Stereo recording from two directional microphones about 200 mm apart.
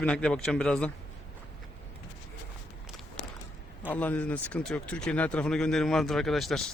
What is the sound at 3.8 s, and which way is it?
Speech, 10° left (ahead or behind).